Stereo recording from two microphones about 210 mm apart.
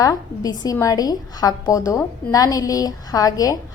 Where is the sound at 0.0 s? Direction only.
15° left (ahead or behind).